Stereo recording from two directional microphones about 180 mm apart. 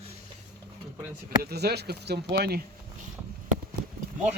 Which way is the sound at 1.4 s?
60° right (ahead or behind).